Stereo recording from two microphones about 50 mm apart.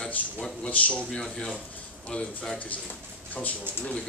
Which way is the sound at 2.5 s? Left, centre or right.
Left.